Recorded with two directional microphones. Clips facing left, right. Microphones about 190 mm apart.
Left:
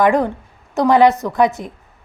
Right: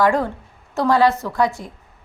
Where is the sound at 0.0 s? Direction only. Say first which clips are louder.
Left 3 dB; 20° left (ahead or behind).